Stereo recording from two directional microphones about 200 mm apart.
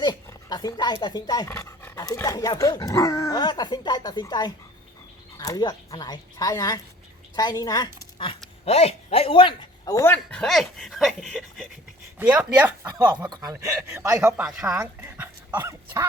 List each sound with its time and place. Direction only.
0.0 s a man's voice: 20° left (ahead or behind); by 12.9 s 10° right (ahead or behind)
12.9 s speech: 20° right (ahead or behind)